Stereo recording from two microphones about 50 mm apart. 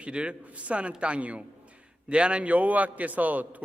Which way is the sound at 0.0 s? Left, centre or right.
Right.